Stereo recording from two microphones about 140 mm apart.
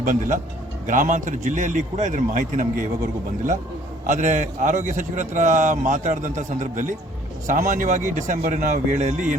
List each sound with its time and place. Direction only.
0.0 s a man's voice: 65° right (ahead or behind)
4.0 s a man's voice: 60° right (ahead or behind)